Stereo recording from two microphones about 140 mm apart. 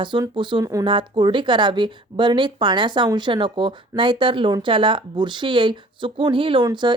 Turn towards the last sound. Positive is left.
turn(degrees=-35)  # may be behind; listen again after turning